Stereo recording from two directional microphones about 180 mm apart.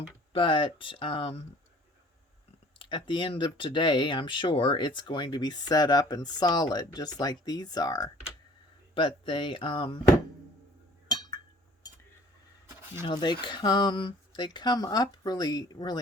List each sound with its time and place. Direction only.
0.3 s speech: 30° left (ahead or behind)
2.7 s speech: 25° left (ahead or behind)
13.1 s speech: 25° left (ahead or behind)